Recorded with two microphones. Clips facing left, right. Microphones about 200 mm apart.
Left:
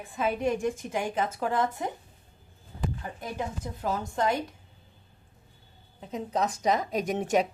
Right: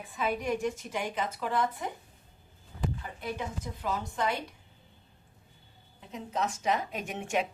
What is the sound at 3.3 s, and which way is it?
Speech, 45° left (ahead or behind).